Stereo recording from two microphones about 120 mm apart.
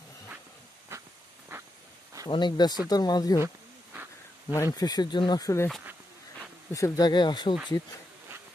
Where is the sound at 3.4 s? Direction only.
15° right (ahead or behind).